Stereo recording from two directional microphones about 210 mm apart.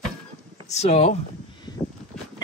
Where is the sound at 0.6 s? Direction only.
30° left (ahead or behind).